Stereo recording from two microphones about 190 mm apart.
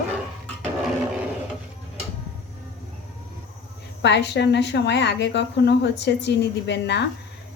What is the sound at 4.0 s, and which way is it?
Speech, 65° left (ahead or behind).